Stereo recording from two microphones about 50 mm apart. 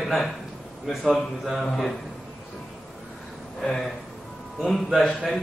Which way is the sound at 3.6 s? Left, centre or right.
Centre.